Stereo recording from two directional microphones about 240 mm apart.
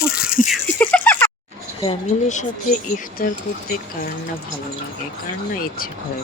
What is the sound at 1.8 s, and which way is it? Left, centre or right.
Speech, left.